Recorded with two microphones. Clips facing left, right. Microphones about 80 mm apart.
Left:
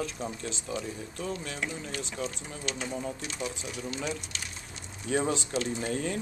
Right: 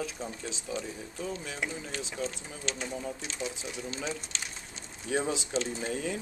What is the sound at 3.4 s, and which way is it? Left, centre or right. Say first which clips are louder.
Speech: left 1 dB; right.